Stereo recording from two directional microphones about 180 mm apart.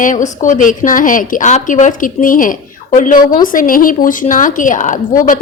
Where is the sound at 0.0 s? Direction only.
45° left (ahead or behind).